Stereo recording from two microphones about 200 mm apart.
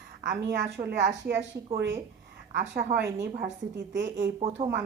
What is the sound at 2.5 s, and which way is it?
Speech, 55° right (ahead or behind).